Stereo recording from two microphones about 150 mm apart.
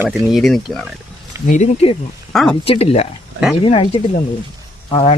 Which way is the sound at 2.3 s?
Centre (ahead or behind).